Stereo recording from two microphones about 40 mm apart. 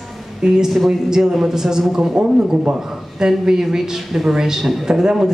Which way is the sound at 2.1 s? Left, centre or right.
Right.